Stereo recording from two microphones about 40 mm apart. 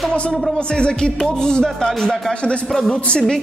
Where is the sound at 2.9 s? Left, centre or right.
Left.